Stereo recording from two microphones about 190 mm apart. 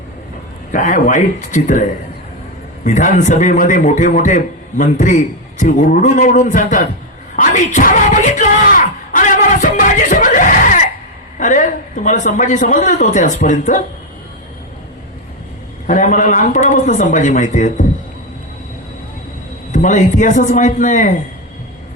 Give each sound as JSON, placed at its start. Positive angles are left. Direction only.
{"t": 0.7, "sound": "a man's voice", "side_deg": 45}
{"t": 7.3, "sound": "a sound", "side_deg": 40}
{"t": 11.3, "sound": "a man's voice", "side_deg": 40}
{"t": 15.9, "sound": "a man's voice", "side_deg": 40}
{"t": 19.7, "sound": "a man's voice", "side_deg": 40}